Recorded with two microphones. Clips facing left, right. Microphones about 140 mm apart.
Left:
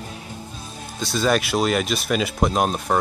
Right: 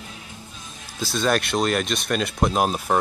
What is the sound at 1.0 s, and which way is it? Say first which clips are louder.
Speech: left 2 dB; centre (ahead or behind).